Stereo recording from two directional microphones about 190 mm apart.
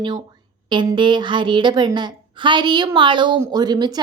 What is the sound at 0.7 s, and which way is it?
A woman's voice, 25° right (ahead or behind).